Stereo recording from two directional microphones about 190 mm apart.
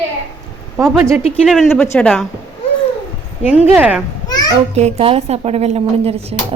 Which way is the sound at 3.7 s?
10° right (ahead or behind).